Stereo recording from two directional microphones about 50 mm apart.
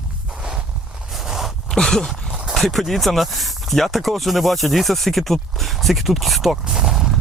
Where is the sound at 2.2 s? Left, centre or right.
Centre.